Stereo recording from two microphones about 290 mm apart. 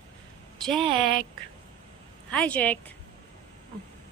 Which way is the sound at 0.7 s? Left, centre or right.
Centre.